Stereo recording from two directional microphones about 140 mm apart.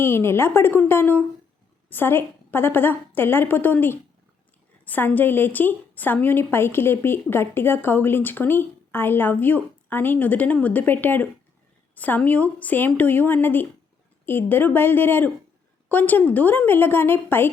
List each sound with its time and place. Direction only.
0.0 s a woman's voice: 20° left (ahead or behind)